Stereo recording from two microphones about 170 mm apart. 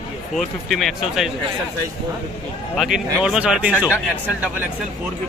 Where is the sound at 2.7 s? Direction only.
Centre (ahead or behind).